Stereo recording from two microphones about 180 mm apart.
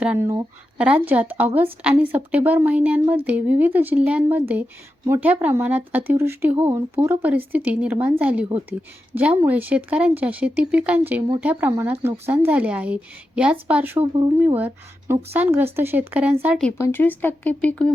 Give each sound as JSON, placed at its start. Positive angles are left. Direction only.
{"t": 0.0, "sound": "speech", "side_deg": -10}
{"t": 14.0, "sound": "speech", "side_deg": -25}
{"t": 14.3, "sound": "speech", "side_deg": -10}
{"t": 16.7, "sound": "speech", "side_deg": 15}